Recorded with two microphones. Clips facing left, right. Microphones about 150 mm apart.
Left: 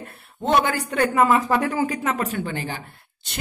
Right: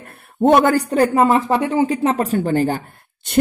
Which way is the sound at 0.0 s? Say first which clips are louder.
Right 11 dB; 50° right (ahead or behind).